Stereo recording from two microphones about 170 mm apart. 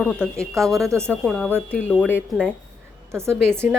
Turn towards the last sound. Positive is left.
turn(degrees=-15)  # may be behind; listen again after turning